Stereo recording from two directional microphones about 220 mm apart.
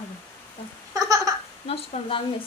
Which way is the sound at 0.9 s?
15° right (ahead or behind).